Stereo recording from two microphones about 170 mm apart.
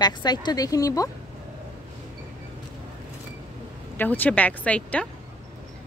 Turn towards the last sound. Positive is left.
turn(degrees=5)  # may be behind; listen again after turning